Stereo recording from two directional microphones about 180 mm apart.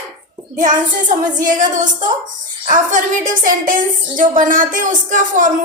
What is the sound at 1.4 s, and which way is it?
A woman's voice, 45° right (ahead or behind).